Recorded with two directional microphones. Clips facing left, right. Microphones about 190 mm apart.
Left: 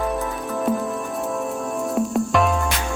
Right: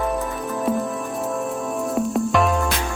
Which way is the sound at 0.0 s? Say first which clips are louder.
Even; centre (ahead or behind).